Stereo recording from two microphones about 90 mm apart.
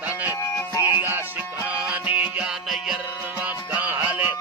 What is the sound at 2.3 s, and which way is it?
Music, 5° right (ahead or behind).